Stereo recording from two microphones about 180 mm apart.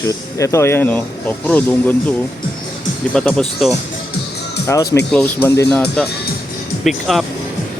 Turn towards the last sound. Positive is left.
turn(degrees=0)  # may be behind; listen again after turning